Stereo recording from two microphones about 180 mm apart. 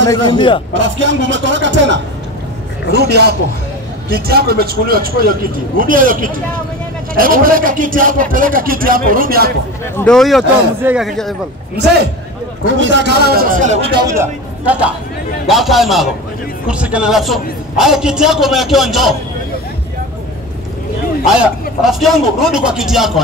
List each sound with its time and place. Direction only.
0.1 s a man's voice: 25° left (ahead or behind)
0.7 s speech: 90° right
2.9 s a man's voice: 65° right (ahead or behind)
9.9 s a man's voice: 5° left (ahead or behind)
12.7 s a man's voice: 90° right; by 13.8 s 45° right (ahead or behind)
14.0 s a man's voice: 15° right (ahead or behind)
21.3 s a man's voice: centre (ahead or behind)